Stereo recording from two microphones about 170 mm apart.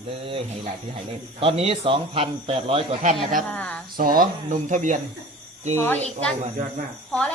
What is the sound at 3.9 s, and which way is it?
Speech, 55° right (ahead or behind).